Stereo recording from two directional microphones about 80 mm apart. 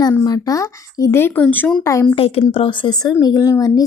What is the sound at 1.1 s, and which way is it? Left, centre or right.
Speech, left.